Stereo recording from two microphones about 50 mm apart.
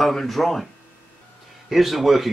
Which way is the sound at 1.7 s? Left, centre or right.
Centre.